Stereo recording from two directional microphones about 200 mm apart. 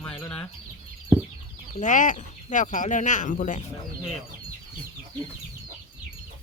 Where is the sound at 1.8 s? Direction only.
40° left (ahead or behind).